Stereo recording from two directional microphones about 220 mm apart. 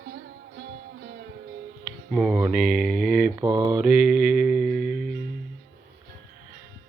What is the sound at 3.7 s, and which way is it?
Mantra, 5° right (ahead or behind).